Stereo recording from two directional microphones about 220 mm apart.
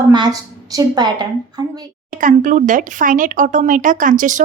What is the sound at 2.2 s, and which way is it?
Speech, 35° right (ahead or behind).